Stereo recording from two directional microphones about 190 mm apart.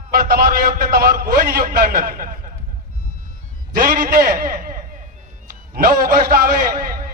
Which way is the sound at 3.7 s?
50° right (ahead or behind).